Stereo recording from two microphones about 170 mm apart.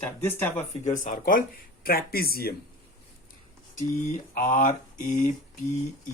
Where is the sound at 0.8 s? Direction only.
50° left (ahead or behind).